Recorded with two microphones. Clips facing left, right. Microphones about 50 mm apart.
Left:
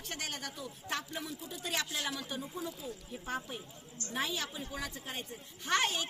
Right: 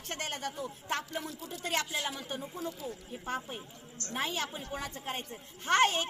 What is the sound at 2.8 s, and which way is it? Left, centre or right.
Speech, right.